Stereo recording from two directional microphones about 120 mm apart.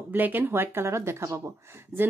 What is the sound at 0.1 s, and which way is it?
Speech, 15° right (ahead or behind).